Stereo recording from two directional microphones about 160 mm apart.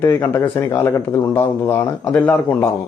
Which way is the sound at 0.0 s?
15° left (ahead or behind).